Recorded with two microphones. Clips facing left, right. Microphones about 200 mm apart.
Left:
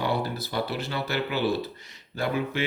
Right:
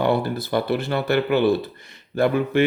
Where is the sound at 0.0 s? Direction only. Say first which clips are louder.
Right 7 dB; 55° right (ahead or behind).